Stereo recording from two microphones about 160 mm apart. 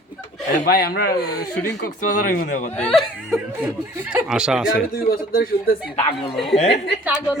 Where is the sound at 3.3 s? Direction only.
10° right (ahead or behind).